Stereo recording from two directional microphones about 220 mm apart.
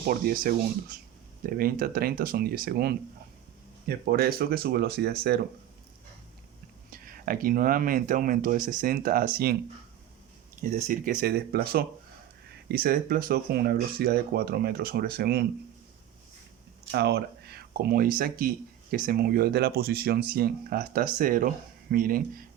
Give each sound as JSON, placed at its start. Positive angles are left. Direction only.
{"t": 0.1, "sound": "speech", "side_deg": -40}
{"t": 6.9, "sound": "speech", "side_deg": -40}
{"t": 10.6, "sound": "speech", "side_deg": -35}
{"t": 16.9, "sound": "speech", "side_deg": -45}